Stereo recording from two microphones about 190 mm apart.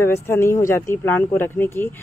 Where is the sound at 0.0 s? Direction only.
15° left (ahead or behind).